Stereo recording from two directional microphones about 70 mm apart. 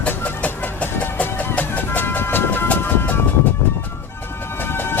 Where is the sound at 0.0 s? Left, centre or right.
Left.